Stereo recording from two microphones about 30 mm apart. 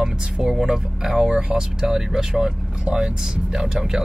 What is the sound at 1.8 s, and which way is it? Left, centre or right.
Speech, centre.